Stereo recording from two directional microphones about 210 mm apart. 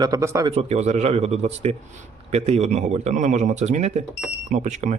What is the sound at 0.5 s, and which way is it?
A man's voice, 30° right (ahead or behind).